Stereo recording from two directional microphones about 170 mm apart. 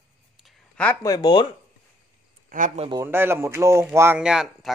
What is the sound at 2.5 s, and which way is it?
Speech, 55° right (ahead or behind).